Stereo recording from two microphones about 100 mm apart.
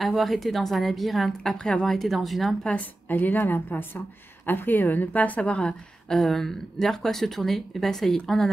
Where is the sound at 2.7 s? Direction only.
15° left (ahead or behind).